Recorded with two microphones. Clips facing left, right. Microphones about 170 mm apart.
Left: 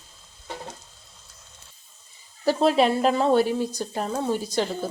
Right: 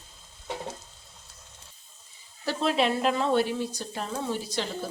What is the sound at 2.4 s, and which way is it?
Speech, 40° left (ahead or behind).